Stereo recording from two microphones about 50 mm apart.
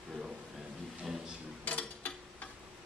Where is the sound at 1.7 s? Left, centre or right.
Left.